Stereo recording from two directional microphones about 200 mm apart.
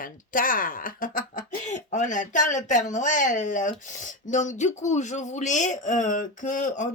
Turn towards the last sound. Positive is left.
turn(degrees=40)  # may be behind; listen again after turning